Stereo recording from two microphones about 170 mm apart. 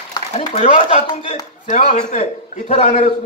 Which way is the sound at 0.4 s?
30° left (ahead or behind).